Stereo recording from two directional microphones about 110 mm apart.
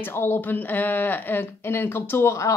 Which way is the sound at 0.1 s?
20° left (ahead or behind).